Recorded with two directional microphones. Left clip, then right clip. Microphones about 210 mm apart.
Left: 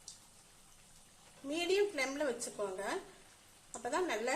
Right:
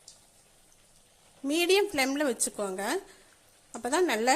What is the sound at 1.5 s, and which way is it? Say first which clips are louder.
A woman's voice: right 8 dB; 45° right (ahead or behind).